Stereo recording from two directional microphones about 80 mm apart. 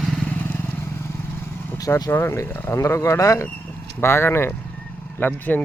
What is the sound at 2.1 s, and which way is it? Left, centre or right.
Speech, left.